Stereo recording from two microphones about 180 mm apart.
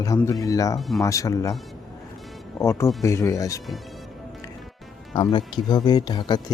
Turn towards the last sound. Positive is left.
turn(degrees=25)  # may be behind; listen again after turning